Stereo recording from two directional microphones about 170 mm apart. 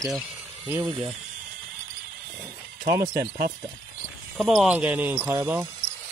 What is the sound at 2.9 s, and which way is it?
Speech, 20° right (ahead or behind).